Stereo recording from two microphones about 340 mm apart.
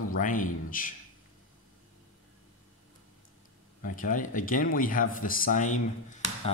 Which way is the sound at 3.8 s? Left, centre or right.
Left.